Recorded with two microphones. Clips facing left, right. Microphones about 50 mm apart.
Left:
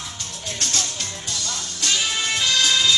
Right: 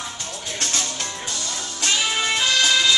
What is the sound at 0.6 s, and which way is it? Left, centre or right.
Music, centre.